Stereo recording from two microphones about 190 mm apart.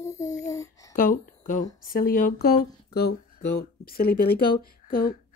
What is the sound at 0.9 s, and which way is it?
Speech, 45° left (ahead or behind).